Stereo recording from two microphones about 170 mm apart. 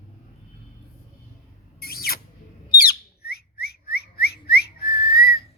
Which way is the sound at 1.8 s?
65° left (ahead or behind).